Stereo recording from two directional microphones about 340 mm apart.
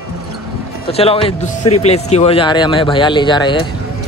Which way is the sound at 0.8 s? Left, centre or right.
Centre.